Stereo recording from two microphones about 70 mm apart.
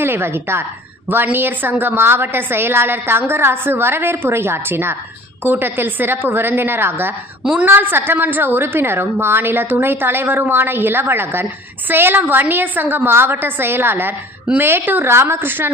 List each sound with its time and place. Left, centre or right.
0.0 s a woman's voice: right